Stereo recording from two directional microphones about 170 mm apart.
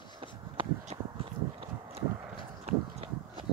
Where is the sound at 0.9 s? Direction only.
40° right (ahead or behind).